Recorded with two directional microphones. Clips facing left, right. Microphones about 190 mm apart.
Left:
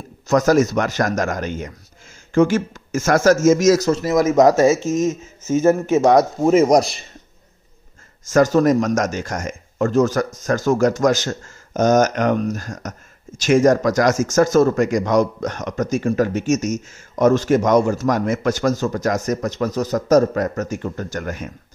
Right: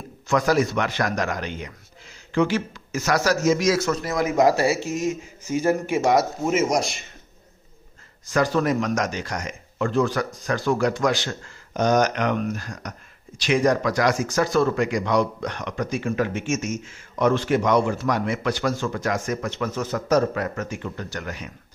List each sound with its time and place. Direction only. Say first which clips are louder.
0.3 s speech: left 5 dB; 45° left (ahead or behind)
3.9 s speech: left 8 dB; 20° left (ahead or behind)
4.2 s speech: left 5 dB; 40° left (ahead or behind)
4.6 s speech: left 7 dB; 20° left (ahead or behind)
6.4 s speech: left 8 dB; 35° left (ahead or behind)
8.3 s speech: left 7 dB; 45° left (ahead or behind)